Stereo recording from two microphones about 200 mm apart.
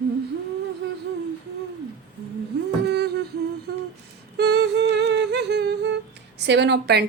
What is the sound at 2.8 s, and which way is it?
Humming, 55° right (ahead or behind).